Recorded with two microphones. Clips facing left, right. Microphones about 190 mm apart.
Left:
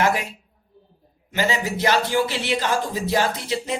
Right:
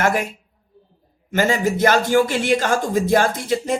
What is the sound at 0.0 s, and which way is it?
Speech, 50° right (ahead or behind).